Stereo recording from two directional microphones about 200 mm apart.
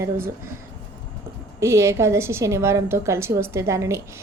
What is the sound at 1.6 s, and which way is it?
A woman's voice, 15° right (ahead or behind).